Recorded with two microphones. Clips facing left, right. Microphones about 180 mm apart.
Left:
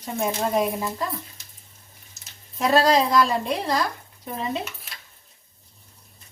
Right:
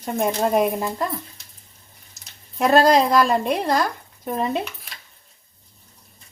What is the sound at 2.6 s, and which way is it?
A woman's voice, 55° right (ahead or behind).